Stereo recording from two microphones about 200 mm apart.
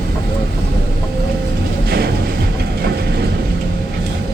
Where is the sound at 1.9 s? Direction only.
50° right (ahead or behind).